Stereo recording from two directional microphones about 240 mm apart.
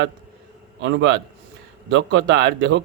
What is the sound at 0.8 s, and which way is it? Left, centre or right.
A man's voice, right.